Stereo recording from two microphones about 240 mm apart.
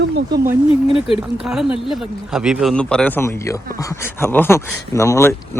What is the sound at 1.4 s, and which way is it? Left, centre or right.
Speech, centre.